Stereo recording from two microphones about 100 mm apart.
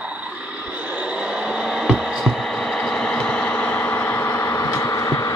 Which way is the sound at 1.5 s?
5° right (ahead or behind).